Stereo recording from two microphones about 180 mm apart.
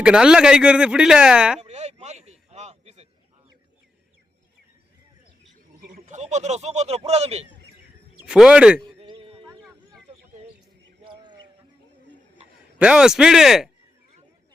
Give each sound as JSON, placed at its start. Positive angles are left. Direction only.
{"t": 0.0, "sound": "speech", "side_deg": -5}
{"t": 1.6, "sound": "chop", "side_deg": -40}
{"t": 5.9, "sound": "speech", "side_deg": -40}
{"t": 8.3, "sound": "speech", "side_deg": -5}
{"t": 9.0, "sound": "a sound", "side_deg": -30}
{"t": 11.1, "sound": "a sound", "side_deg": -25}
{"t": 12.8, "sound": "speech", "side_deg": -5}